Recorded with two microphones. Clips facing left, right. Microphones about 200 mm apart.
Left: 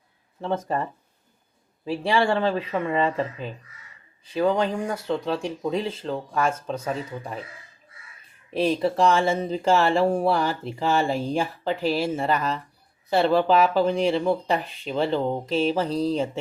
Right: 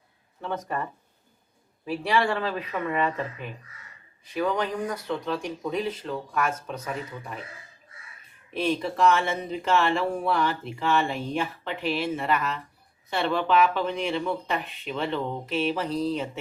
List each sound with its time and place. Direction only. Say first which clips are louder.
0.4 s speech: left 5 dB; 30° left (ahead or behind)
1.8 s speech: left 2 dB; 30° left (ahead or behind)
8.4 s speech: left 4 dB; 35° left (ahead or behind)